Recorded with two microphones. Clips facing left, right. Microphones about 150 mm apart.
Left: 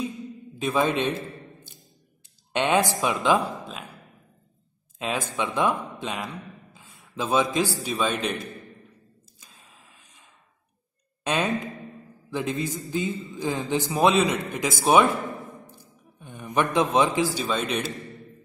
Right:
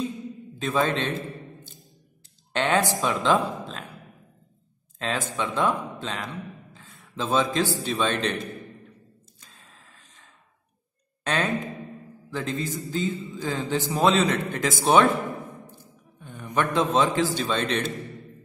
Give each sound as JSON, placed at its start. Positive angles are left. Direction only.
{"t": 0.6, "sound": "a man's voice", "side_deg": 15}
{"t": 2.5, "sound": "a man's voice", "side_deg": 20}
{"t": 4.9, "sound": "a man's voice", "side_deg": 10}
{"t": 6.1, "sound": "a man's voice", "side_deg": 5}
{"t": 9.4, "sound": "gasp", "side_deg": 5}
{"t": 11.2, "sound": "a man's voice", "side_deg": 15}
{"t": 16.2, "sound": "a man's voice", "side_deg": 15}